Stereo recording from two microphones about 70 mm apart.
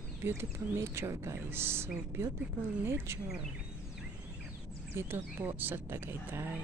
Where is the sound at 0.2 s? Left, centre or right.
Right.